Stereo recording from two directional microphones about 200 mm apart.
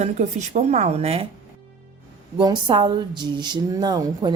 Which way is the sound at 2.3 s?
25° right (ahead or behind).